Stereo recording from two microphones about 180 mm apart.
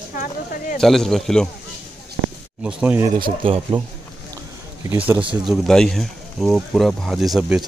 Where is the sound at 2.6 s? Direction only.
10° right (ahead or behind).